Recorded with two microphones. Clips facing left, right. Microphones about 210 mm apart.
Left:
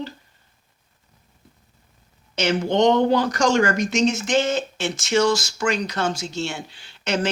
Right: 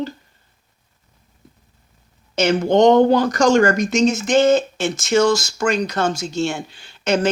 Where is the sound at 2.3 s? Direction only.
45° right (ahead or behind).